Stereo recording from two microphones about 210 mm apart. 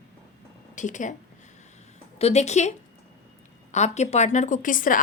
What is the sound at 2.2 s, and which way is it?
Speech, 30° left (ahead or behind).